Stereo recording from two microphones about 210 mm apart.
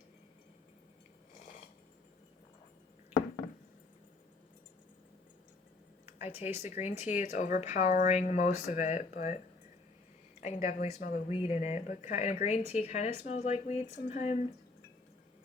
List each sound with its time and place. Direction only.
6.1 s speech: 30° left (ahead or behind)
10.4 s speech: 35° left (ahead or behind)